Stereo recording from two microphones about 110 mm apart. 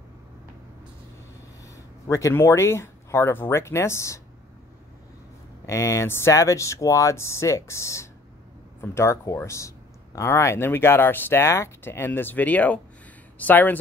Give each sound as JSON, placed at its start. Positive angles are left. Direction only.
{"t": 2.0, "sound": "speech", "side_deg": 25}
{"t": 5.7, "sound": "speech", "side_deg": 25}